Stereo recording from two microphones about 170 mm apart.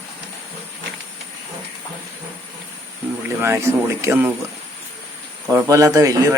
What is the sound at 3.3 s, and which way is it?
Speech, 15° right (ahead or behind).